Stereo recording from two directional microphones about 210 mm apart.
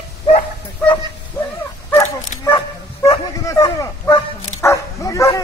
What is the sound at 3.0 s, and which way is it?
Bow-wow, 15° left (ahead or behind).